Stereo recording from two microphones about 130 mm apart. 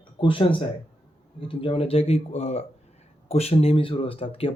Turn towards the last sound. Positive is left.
turn(degrees=45)  # may be behind; listen again after turning